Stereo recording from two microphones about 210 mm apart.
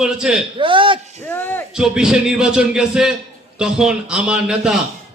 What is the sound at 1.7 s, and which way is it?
A man's voice, 5° right (ahead or behind).